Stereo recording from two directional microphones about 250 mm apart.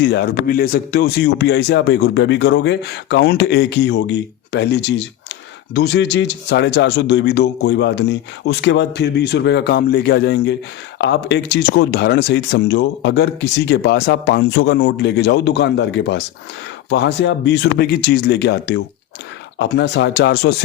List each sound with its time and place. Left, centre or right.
0.0 s speech: left